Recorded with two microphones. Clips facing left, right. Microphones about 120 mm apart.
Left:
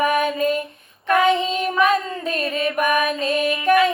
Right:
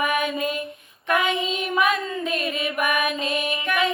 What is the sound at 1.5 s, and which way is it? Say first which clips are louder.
Child singing: left 4 dB; 35° left (ahead or behind).